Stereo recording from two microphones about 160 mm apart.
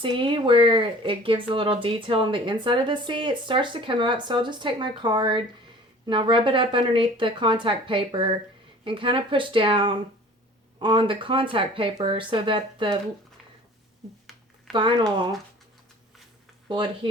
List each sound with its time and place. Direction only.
0.0 s speech: 30° right (ahead or behind)
14.7 s speech: 30° right (ahead or behind)
16.6 s speech: 30° right (ahead or behind)